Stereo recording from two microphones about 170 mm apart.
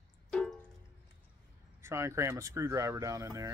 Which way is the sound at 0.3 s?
5° left (ahead or behind).